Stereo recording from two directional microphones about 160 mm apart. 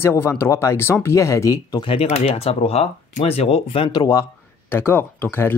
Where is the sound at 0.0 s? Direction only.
15° left (ahead or behind).